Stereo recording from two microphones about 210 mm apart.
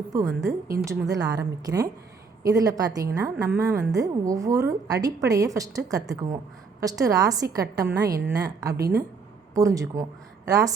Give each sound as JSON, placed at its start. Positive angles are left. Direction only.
{"t": 0.1, "sound": "a woman's voice", "side_deg": -15}
{"t": 9.6, "sound": "a woman's voice", "side_deg": -15}